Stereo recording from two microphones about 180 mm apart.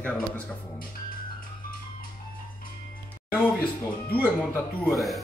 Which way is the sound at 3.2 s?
10° left (ahead or behind).